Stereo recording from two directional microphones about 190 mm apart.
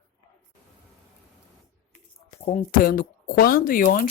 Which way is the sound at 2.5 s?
45° left (ahead or behind).